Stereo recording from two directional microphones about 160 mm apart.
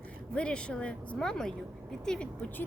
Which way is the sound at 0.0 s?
5° left (ahead or behind).